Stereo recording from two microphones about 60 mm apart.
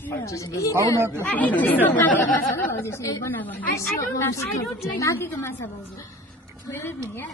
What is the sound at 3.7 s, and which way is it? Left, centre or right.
Speech, left.